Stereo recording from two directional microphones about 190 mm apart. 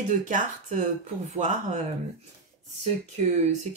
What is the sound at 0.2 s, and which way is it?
Speech, 40° right (ahead or behind).